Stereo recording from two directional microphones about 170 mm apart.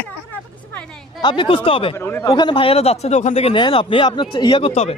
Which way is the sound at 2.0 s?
15° left (ahead or behind).